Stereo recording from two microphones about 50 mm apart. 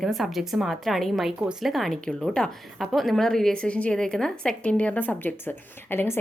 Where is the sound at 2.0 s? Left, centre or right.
Centre.